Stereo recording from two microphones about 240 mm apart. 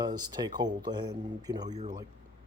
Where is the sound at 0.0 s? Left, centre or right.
Centre.